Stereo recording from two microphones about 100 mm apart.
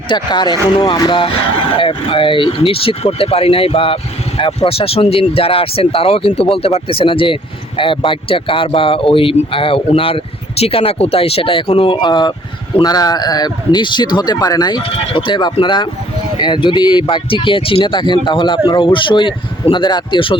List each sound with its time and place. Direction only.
0.1 s speech: 50° left (ahead or behind)
1.8 s speech: 65° left (ahead or behind)